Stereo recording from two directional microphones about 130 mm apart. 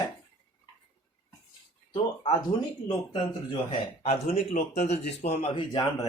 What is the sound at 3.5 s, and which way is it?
A man's voice, 45° left (ahead or behind).